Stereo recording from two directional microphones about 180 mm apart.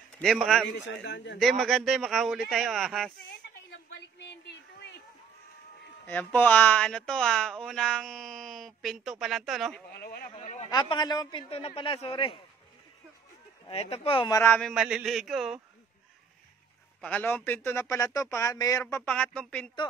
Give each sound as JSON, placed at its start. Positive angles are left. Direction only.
{"t": 0.2, "sound": "speech", "side_deg": 0}
{"t": 0.8, "sound": "a man's voice", "side_deg": 75}
{"t": 1.4, "sound": "speech", "side_deg": 0}
{"t": 3.3, "sound": "a sound", "side_deg": 70}
{"t": 6.0, "sound": "speech", "side_deg": 10}
{"t": 9.9, "sound": "speech", "side_deg": 55}
{"t": 10.3, "sound": "a sound", "side_deg": 35}
{"t": 10.7, "sound": "a man's voice", "side_deg": 25}
{"t": 13.7, "sound": "speech", "side_deg": 35}
{"t": 14.4, "sound": "speech", "side_deg": 5}
{"t": 17.0, "sound": "speech", "side_deg": 10}
{"t": 19.0, "sound": "speech", "side_deg": 5}